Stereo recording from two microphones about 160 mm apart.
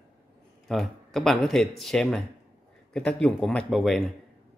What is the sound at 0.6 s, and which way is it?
Speech, centre (ahead or behind).